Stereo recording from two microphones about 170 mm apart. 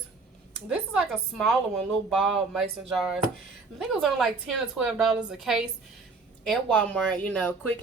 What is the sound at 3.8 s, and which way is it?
A woman's voice, centre (ahead or behind).